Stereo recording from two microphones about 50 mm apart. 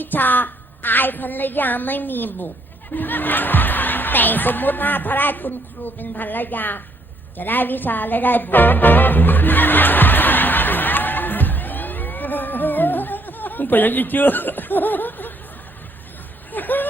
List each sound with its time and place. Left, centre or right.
0.0 s speech: left
7.3 s music: left
16.5 s vehicle: left